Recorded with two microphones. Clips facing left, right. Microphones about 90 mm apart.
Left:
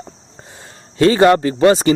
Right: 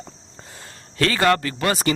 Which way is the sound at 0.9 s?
25° left (ahead or behind).